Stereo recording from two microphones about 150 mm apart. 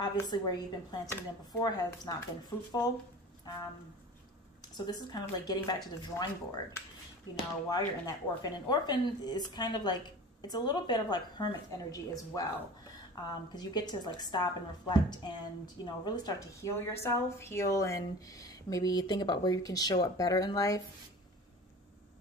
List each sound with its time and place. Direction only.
0.0 s a woman's voice: 30° left (ahead or behind)
2.5 s speech: 15° left (ahead or behind)
4.6 s a woman's voice: 30° left (ahead or behind)